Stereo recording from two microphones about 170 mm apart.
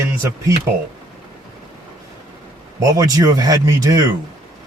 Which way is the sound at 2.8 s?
20° right (ahead or behind).